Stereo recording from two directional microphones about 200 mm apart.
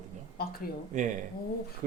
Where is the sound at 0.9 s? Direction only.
40° right (ahead or behind).